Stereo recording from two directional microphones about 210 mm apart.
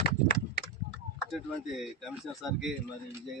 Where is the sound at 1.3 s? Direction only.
Centre (ahead or behind).